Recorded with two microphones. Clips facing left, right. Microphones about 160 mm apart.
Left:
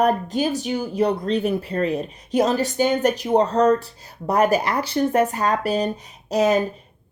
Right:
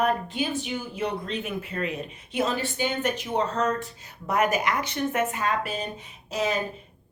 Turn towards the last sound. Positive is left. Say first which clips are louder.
# left 9 dB
turn(degrees=40)  # may be behind; listen again after turning